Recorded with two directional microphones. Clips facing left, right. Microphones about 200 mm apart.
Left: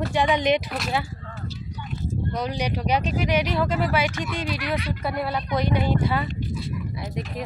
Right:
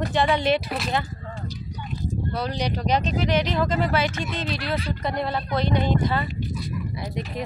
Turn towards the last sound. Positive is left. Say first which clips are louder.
# right 1 dB
turn(degrees=0)  # may be behind; listen again after turning